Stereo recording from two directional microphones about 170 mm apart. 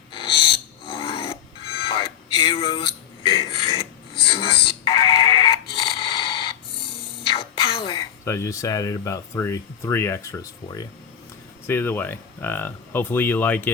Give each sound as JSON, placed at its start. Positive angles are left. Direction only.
{"t": 0.1, "sound": "music", "side_deg": 30}
{"t": 5.7, "sound": "a sound", "side_deg": 30}
{"t": 8.2, "sound": "speech", "side_deg": 15}